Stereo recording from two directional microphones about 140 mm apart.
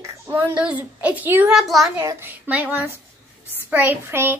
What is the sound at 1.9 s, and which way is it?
A child's voice, 15° right (ahead or behind).